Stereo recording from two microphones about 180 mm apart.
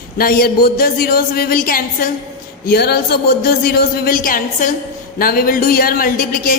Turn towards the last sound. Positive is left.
turn(degrees=50)  # may be behind; listen again after turning